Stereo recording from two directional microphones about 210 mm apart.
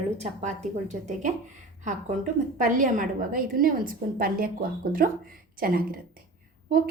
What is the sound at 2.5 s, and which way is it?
A woman's voice, 40° right (ahead or behind).